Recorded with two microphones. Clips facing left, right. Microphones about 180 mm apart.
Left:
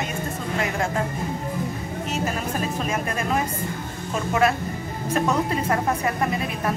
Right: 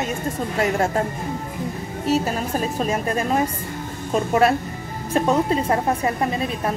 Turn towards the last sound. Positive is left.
turn(degrees=-25)  # may be behind; listen again after turning